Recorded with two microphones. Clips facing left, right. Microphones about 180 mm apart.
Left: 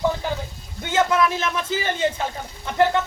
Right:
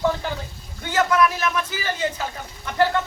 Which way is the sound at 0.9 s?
25° left (ahead or behind).